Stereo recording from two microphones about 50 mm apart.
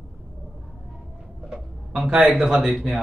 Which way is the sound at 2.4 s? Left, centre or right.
Centre.